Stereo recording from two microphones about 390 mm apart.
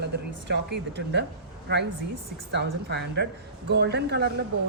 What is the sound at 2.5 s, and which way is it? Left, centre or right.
Speech, right.